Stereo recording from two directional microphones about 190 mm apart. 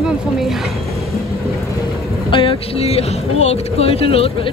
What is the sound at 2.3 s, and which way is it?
Speech, 25° left (ahead or behind).